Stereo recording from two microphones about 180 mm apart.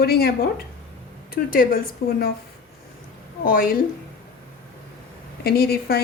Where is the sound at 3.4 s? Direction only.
55° left (ahead or behind).